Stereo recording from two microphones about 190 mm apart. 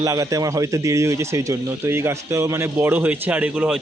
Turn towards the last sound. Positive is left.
turn(degrees=-5)  # may be behind; listen again after turning